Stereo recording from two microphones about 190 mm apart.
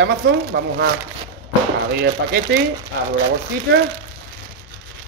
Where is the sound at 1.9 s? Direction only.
60° right (ahead or behind).